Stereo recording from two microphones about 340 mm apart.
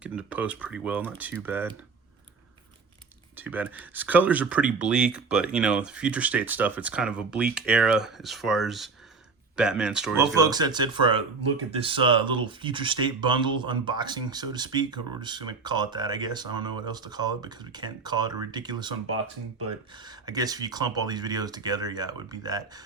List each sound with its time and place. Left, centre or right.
0.0 s speech: centre
3.3 s speech: centre
19.0 s speech: right
20.0 s speech: centre